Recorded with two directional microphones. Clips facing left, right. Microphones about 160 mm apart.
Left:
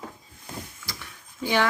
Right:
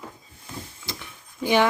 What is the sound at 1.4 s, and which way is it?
Speech, 15° right (ahead or behind).